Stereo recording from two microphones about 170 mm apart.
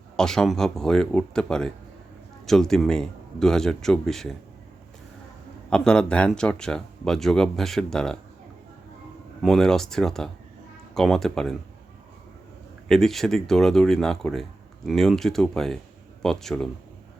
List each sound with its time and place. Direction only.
0.2 s speech: 5° left (ahead or behind)
5.7 s speech: 5° left (ahead or behind)
9.4 s speech: centre (ahead or behind)
12.9 s speech: centre (ahead or behind)